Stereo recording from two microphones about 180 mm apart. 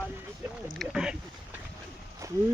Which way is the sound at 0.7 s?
Centre (ahead or behind).